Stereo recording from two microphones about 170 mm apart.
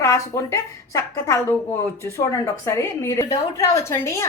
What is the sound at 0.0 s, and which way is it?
A woman's voice, 15° left (ahead or behind).